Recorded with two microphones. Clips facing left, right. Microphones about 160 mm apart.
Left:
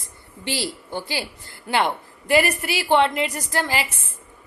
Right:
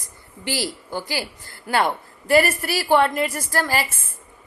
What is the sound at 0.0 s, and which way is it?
A woman's voice, 25° left (ahead or behind).